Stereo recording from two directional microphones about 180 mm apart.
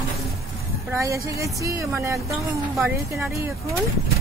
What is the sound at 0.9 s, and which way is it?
A woman's voice, 15° right (ahead or behind).